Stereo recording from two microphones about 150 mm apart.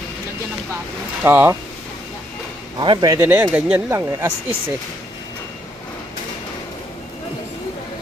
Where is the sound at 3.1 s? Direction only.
15° right (ahead or behind).